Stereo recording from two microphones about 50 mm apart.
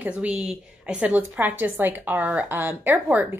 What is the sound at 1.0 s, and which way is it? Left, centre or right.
A woman's voice, right.